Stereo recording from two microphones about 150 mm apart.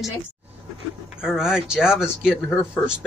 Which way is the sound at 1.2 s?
5° right (ahead or behind).